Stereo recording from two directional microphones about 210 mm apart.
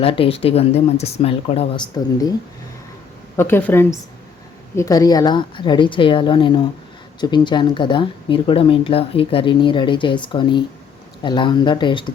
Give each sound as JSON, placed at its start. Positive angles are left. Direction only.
{"t": 0.0, "sound": "speech", "side_deg": 25}
{"t": 3.3, "sound": "a woman's voice", "side_deg": 10}